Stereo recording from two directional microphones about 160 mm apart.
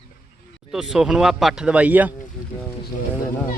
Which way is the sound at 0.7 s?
5° right (ahead or behind).